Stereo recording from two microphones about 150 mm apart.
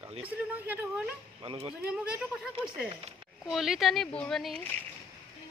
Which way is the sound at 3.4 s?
Centre (ahead or behind).